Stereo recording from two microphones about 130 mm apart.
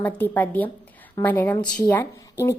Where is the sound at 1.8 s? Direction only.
20° left (ahead or behind).